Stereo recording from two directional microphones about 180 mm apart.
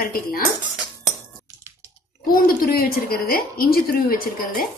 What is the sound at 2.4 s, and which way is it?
A woman's voice, 55° left (ahead or behind).